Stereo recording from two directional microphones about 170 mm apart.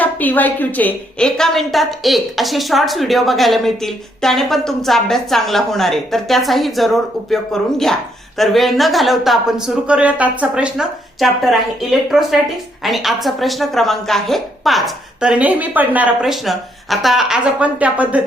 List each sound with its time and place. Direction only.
0.0 s a woman's voice: 10° left (ahead or behind); by 18.2 s 10° right (ahead or behind)